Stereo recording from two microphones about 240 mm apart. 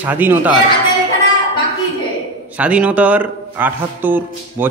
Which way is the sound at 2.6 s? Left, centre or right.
Centre.